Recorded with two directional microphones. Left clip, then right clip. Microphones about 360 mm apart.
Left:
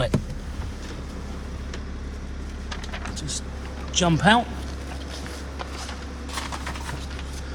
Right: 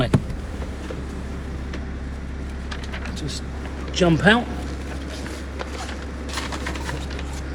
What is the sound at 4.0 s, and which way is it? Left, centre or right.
Speech, centre.